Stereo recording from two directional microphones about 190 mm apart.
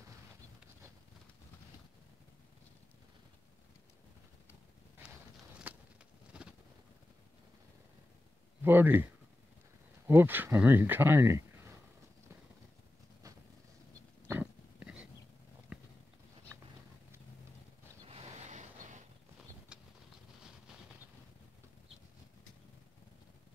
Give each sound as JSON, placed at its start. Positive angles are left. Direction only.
{"t": 5.7, "sound": "a sound", "side_deg": -10}
{"t": 6.4, "sound": "boat", "side_deg": -5}
{"t": 8.6, "sound": "speech", "side_deg": -10}
{"t": 14.2, "sound": "pig", "side_deg": -10}
{"t": 15.7, "sound": "clip-clop", "side_deg": -5}
{"t": 18.0, "sound": "a sound", "side_deg": -35}
{"t": 19.7, "sound": "bird flight", "side_deg": -5}